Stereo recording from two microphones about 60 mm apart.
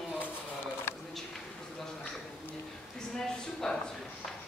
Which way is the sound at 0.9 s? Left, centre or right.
Left.